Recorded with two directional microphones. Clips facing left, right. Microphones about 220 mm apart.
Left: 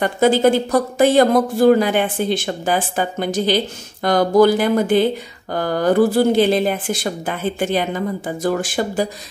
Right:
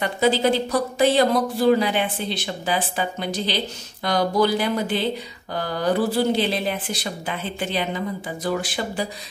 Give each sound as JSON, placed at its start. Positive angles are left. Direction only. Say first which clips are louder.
{"t": 0.0, "sound": "speech", "louder": "left 5 dB", "side_deg": 50}